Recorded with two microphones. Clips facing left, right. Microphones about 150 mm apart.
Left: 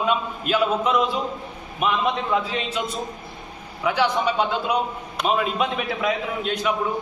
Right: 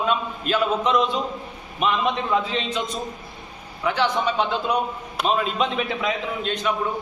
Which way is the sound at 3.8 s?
10° left (ahead or behind).